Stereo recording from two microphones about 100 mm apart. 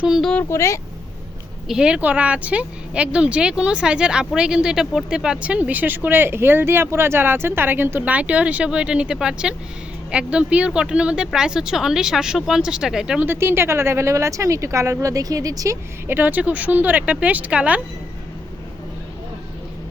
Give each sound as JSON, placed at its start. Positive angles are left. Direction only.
{"t": 0.0, "sound": "speech", "side_deg": -5}
{"t": 0.5, "sound": "speech", "side_deg": 30}
{"t": 1.6, "sound": "speech", "side_deg": -5}
{"t": 13.2, "sound": "speech", "side_deg": -25}
{"t": 16.0, "sound": "speech", "side_deg": -20}